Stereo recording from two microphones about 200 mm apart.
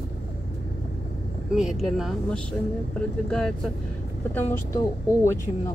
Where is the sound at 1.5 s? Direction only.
Centre (ahead or behind).